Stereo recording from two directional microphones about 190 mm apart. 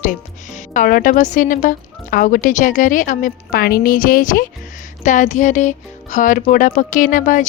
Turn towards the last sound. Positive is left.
turn(degrees=45)  # may be behind; listen again after turning